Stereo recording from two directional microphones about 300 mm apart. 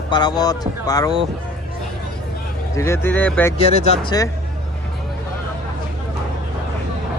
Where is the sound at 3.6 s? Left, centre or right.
Left.